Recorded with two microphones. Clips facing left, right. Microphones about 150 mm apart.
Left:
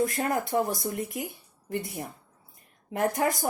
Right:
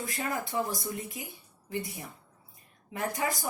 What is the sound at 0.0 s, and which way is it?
Speech, 55° left (ahead or behind).